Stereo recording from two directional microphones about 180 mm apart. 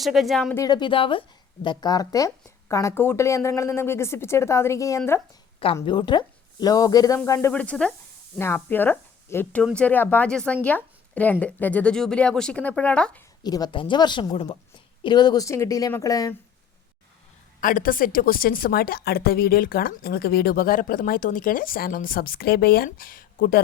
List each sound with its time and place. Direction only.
0.0 s speech: centre (ahead or behind)
0.5 s speech: 20° left (ahead or behind)
5.8 s speech: 25° left (ahead or behind); by 13.2 s 5° left (ahead or behind)
13.4 s speech: 20° left (ahead or behind)
17.6 s a woman's voice: 50° left (ahead or behind)